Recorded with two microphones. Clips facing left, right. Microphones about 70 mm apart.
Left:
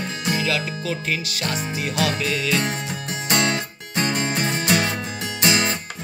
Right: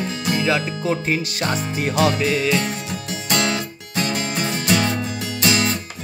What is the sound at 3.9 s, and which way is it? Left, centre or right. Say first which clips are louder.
Music: even; left.